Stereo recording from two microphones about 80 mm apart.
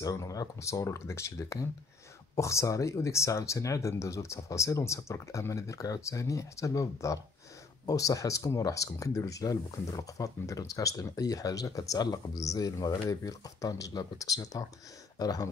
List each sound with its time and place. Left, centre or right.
0.0 s speech: left